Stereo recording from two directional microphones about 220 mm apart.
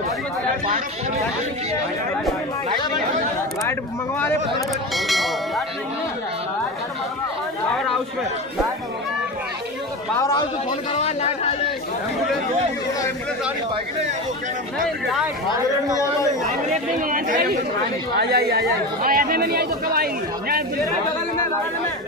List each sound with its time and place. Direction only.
0.7 s speech: 30° right (ahead or behind)
4.9 s speech: centre (ahead or behind)
10.9 s speech: 30° left (ahead or behind)
17.0 s speech: 40° right (ahead or behind)